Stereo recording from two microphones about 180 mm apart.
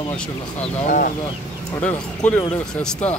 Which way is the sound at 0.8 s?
45° left (ahead or behind).